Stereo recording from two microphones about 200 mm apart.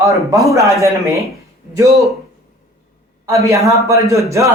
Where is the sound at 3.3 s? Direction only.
15° right (ahead or behind).